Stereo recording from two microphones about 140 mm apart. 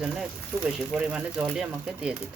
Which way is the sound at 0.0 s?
5° right (ahead or behind).